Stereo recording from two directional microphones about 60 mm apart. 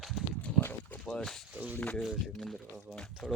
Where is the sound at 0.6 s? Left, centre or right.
Left.